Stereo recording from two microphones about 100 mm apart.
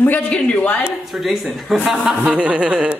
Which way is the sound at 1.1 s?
Centre (ahead or behind).